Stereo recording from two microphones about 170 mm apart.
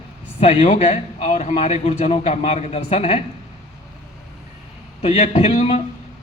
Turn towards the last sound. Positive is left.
turn(degrees=35)  # may be behind; listen again after turning